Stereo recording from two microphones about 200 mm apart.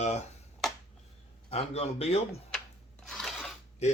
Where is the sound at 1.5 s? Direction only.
30° left (ahead or behind).